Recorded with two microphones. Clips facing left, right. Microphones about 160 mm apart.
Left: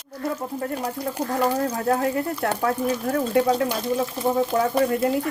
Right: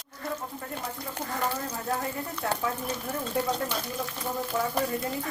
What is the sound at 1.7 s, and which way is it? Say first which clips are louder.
Speech: left 9 dB; 65° left (ahead or behind).